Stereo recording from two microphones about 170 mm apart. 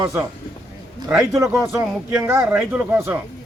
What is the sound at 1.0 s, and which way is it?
A man's voice, 20° right (ahead or behind).